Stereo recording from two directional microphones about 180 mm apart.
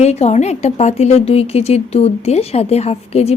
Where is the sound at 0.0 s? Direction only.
40° left (ahead or behind).